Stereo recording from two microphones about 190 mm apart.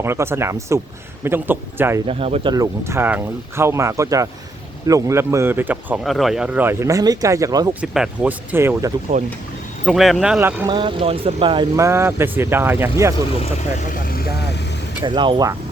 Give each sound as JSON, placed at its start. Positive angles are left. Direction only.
{"t": 0.0, "sound": "speech", "side_deg": -15}
{"t": 2.0, "sound": "speech", "side_deg": -30}
{"t": 7.7, "sound": "speech", "side_deg": -5}
{"t": 9.8, "sound": "speech", "side_deg": 0}
{"t": 10.7, "sound": "speech", "side_deg": -25}
{"t": 11.8, "sound": "speech", "side_deg": -15}
{"t": 13.4, "sound": "speech", "side_deg": 40}
{"t": 15.0, "sound": "speech", "side_deg": -25}